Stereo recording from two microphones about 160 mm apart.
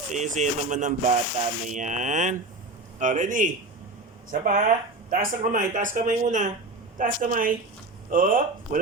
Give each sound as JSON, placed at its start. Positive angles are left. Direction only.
{"t": 0.1, "sound": "speech", "side_deg": -50}